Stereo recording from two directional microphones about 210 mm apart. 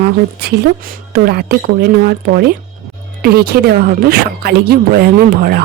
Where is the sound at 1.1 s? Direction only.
50° right (ahead or behind).